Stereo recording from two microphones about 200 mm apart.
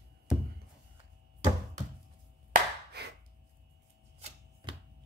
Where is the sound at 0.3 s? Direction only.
Centre (ahead or behind).